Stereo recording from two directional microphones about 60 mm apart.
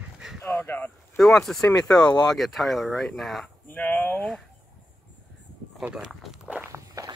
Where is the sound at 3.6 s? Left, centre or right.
Left.